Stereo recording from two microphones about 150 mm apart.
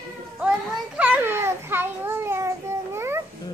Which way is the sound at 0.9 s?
10° right (ahead or behind).